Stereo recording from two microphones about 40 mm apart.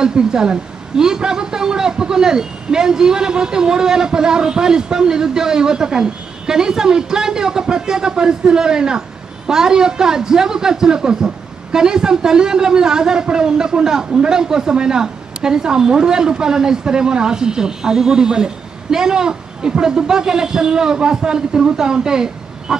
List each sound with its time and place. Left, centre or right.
0.0 s a man's voice: centre